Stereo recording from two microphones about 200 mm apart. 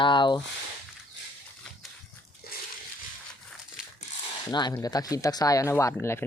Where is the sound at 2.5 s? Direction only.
50° left (ahead or behind).